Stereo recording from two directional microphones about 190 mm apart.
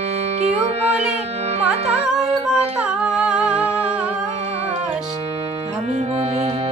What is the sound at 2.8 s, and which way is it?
Humming, 5° right (ahead or behind).